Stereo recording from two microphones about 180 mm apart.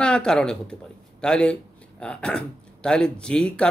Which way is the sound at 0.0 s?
5° left (ahead or behind).